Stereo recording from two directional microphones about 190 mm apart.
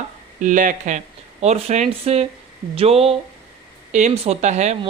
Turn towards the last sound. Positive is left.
turn(degrees=-35)  # may be behind; listen again after turning